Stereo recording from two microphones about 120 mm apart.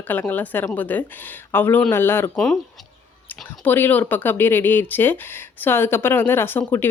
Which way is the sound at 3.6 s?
15° left (ahead or behind).